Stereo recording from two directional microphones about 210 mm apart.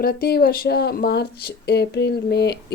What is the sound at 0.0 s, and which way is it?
Speech, 45° left (ahead or behind).